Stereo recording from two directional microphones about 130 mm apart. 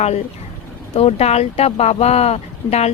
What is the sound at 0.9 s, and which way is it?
Speech, 50° left (ahead or behind).